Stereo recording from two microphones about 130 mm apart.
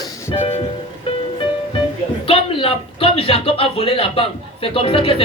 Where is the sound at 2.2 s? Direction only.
45° left (ahead or behind).